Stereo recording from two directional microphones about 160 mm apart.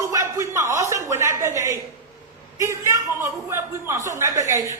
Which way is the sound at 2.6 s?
20° right (ahead or behind).